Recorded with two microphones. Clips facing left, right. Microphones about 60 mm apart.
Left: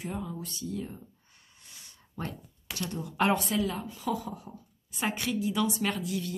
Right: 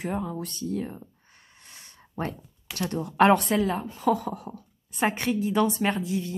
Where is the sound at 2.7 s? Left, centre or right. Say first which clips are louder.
Right 8 dB; right.